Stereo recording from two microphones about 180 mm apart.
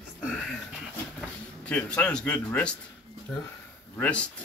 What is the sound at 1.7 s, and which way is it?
Speech, 5° left (ahead or behind).